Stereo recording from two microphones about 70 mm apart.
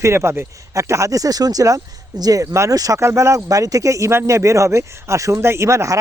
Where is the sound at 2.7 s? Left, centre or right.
Right.